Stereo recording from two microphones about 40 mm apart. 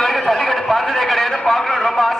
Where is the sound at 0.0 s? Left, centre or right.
Centre.